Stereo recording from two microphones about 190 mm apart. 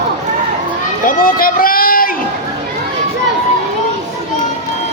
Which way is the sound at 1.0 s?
50° left (ahead or behind).